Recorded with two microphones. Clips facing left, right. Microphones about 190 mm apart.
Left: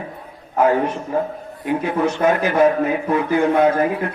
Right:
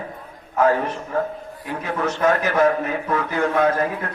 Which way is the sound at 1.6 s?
20° left (ahead or behind).